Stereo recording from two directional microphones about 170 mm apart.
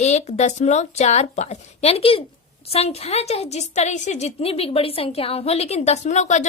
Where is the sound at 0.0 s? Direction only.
40° left (ahead or behind).